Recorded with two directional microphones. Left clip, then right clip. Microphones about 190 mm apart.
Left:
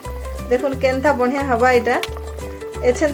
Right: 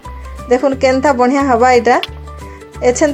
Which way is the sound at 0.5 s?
45° right (ahead or behind).